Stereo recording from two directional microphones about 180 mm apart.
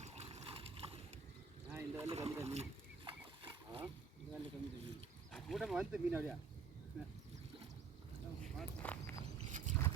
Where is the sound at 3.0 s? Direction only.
30° right (ahead or behind).